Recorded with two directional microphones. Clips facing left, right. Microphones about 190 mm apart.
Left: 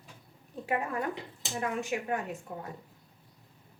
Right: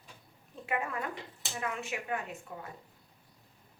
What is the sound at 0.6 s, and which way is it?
A woman's voice, 35° left (ahead or behind).